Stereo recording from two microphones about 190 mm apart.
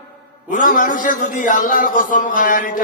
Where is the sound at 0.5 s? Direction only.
45° left (ahead or behind).